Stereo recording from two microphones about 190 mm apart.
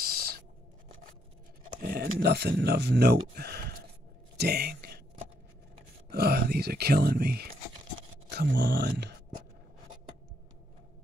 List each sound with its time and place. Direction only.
0.0 s owl: 55° right (ahead or behind)
1.8 s speech: 50° right (ahead or behind)
6.0 s speech: 55° right (ahead or behind)